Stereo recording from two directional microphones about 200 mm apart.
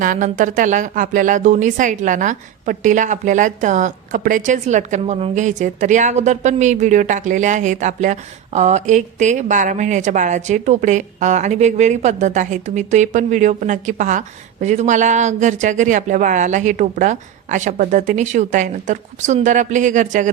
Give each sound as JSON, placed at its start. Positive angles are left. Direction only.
{"t": 0.0, "sound": "speech", "side_deg": -40}